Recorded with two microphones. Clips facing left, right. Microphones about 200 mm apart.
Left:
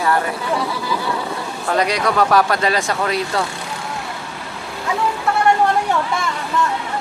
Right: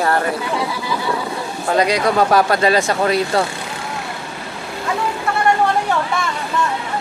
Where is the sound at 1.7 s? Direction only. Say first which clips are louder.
Right 2 dB; 25° right (ahead or behind).